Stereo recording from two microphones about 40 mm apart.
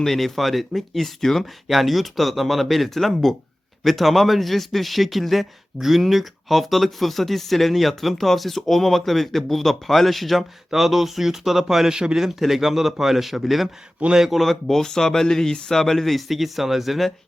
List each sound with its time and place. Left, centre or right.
0.0 s speech: centre
11.9 s speech: centre
12.2 s speech: centre